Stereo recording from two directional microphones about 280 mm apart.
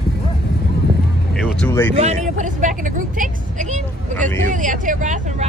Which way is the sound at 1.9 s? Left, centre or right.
Right.